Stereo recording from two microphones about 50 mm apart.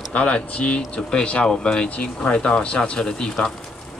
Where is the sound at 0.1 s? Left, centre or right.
Left.